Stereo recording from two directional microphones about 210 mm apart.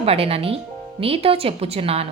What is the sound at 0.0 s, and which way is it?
Speech, 30° right (ahead or behind).